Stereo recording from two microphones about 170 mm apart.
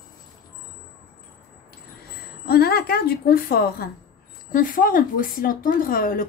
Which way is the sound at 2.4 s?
65° left (ahead or behind).